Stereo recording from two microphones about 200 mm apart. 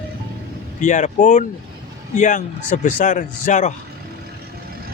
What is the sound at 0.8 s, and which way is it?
Speech, 40° left (ahead or behind).